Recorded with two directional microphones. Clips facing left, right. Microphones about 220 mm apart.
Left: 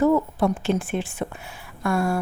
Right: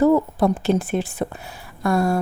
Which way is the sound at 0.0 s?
35° right (ahead or behind).